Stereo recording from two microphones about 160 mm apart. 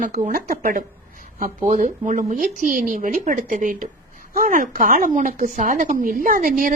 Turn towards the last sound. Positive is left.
turn(degrees=-55)  # may be behind; listen again after turning